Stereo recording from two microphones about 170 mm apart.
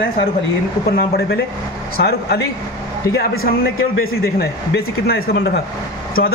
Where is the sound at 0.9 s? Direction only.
65° left (ahead or behind).